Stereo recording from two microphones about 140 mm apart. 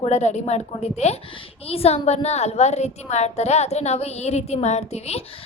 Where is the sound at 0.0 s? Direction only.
50° left (ahead or behind).